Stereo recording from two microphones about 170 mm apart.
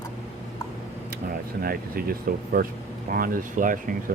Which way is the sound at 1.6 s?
60° right (ahead or behind).